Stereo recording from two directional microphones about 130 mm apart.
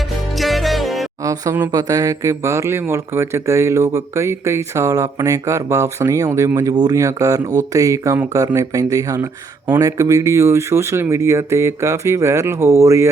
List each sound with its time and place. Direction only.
0.3 s music: centre (ahead or behind)
1.2 s speech: 25° right (ahead or behind)